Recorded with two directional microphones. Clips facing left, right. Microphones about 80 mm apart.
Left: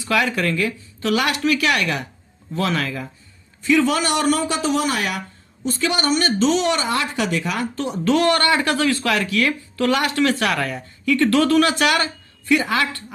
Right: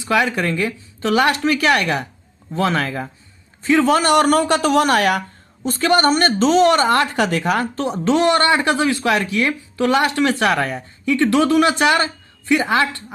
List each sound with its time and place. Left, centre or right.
0.0 s a woman's voice: right
5.6 s a woman's voice: right
8.0 s speech: right